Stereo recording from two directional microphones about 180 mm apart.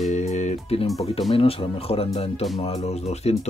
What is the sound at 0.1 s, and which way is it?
Music, 40° left (ahead or behind).